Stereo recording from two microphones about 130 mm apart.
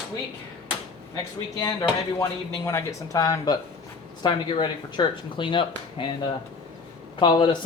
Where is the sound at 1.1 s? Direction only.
35° left (ahead or behind).